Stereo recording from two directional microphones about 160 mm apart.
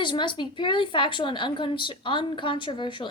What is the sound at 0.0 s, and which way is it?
A woman's voice, 30° left (ahead or behind).